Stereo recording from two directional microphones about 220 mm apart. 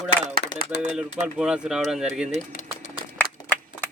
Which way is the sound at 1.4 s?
5° right (ahead or behind).